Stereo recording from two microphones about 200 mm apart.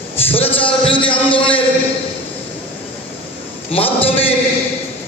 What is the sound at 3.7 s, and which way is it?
Speech, 30° left (ahead or behind).